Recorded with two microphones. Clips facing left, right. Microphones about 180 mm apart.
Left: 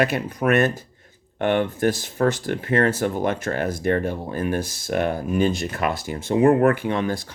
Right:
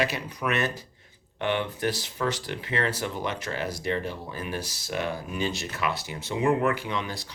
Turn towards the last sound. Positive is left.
turn(degrees=50)  # may be behind; listen again after turning